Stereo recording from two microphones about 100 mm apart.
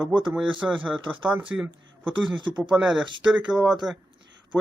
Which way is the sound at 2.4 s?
50° right (ahead or behind).